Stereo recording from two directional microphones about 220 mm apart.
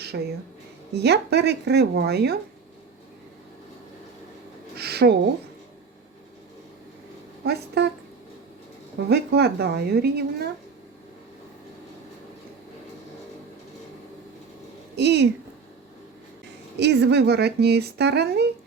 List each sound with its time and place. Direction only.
0.1 s speech: 50° right (ahead or behind)
4.8 s a sound: 45° right (ahead or behind)
7.4 s speech: 45° right (ahead or behind)
9.0 s speech: 45° right (ahead or behind)
14.9 s speech: 50° right (ahead or behind)
16.7 s speech: 50° right (ahead or behind)